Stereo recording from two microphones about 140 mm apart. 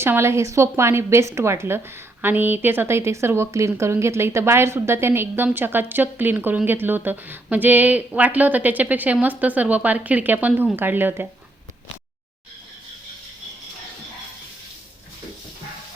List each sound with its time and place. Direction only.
0.0 s a woman's voice: 20° right (ahead or behind)